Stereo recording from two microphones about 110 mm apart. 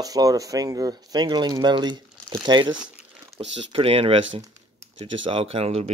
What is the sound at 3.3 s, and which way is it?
Speech, 60° right (ahead or behind).